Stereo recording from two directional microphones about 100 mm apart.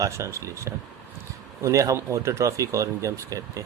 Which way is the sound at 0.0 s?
30° right (ahead or behind).